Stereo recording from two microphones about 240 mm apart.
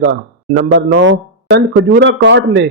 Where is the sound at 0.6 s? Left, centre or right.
Right.